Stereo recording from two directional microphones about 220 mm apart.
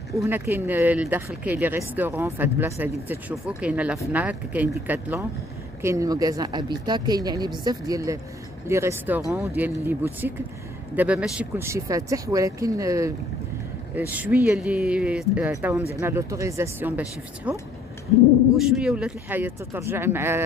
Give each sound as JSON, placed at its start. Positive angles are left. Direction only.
{"t": 0.2, "sound": "speech", "side_deg": -10}
{"t": 14.1, "sound": "speech", "side_deg": -5}